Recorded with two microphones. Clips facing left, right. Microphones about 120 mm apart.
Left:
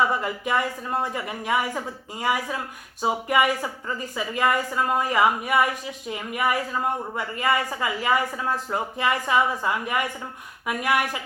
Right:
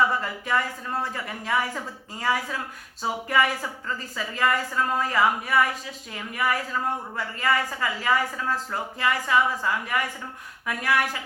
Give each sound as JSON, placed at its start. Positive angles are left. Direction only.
{"t": 0.2, "sound": "a woman's voice", "side_deg": 15}